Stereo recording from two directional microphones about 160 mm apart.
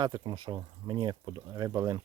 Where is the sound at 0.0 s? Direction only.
25° right (ahead or behind).